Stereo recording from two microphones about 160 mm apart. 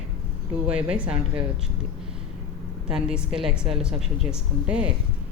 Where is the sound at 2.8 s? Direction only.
5° right (ahead or behind).